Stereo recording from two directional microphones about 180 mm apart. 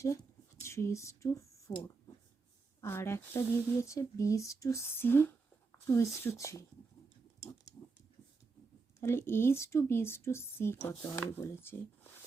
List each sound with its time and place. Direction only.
0.0 s a woman's voice: 15° left (ahead or behind)
5.7 s a sound: 15° left (ahead or behind)
6.2 s a woman's voice: 15° left (ahead or behind)
9.0 s a woman's voice: 15° left (ahead or behind)